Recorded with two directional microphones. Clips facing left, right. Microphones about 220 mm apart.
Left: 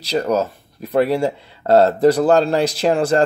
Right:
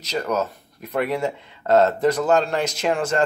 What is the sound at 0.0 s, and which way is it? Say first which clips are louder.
Speech: left 5 dB; 35° left (ahead or behind).